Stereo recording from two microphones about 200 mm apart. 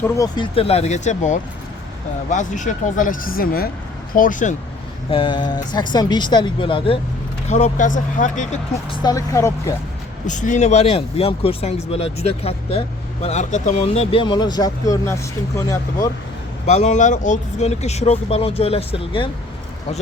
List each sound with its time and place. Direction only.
0.0 s speech: 20° left (ahead or behind); by 4.5 s 40° left (ahead or behind)
5.1 s speech: 25° left (ahead or behind); by 8.4 s 40° left (ahead or behind)
8.9 s speech: 20° left (ahead or behind)
10.2 s speech: 40° left (ahead or behind); by 16.0 s 15° left (ahead or behind)
16.6 s speech: 35° left (ahead or behind)